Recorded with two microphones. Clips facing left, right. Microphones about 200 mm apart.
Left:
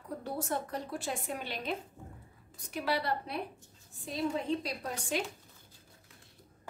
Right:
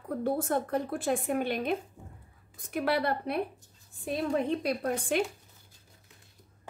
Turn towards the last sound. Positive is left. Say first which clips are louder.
# right 7 dB
turn(degrees=-55)  # may be behind; listen again after turning